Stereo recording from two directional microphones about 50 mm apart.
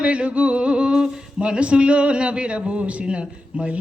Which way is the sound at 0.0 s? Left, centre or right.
Right.